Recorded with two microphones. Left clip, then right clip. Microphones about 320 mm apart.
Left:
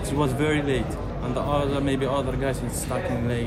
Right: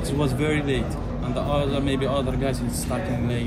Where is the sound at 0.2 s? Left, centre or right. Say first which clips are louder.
Left 1 dB; centre.